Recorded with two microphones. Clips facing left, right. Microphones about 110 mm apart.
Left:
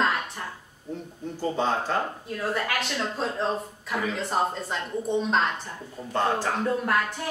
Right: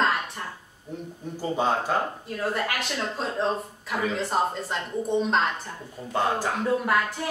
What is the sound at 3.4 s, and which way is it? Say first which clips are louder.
A woman's voice: right 1 dB; centre (ahead or behind).